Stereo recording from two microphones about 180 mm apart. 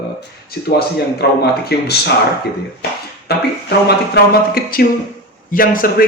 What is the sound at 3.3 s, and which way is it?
A man's voice, 65° left (ahead or behind).